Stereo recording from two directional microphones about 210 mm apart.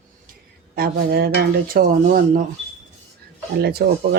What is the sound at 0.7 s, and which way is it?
Speech, 50° right (ahead or behind).